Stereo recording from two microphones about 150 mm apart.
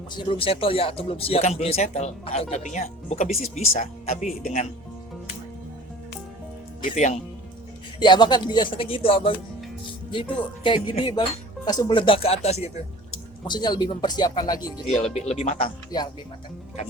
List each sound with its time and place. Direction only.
0.1 s speech: 30° left (ahead or behind); by 4.3 s 45° left (ahead or behind)
6.8 s speech: 55° left (ahead or behind)
7.9 s speech: 30° left (ahead or behind); by 12.8 s 45° left (ahead or behind)
13.5 s speech: 30° left (ahead or behind)
14.9 s speech: 45° left (ahead or behind)